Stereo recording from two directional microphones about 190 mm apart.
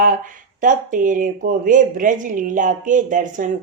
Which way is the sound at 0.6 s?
45° right (ahead or behind).